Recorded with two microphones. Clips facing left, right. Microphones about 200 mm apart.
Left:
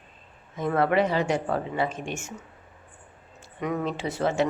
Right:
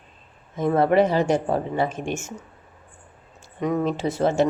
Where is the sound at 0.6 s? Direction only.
20° right (ahead or behind).